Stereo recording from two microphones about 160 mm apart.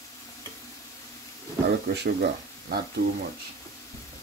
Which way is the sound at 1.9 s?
85° right.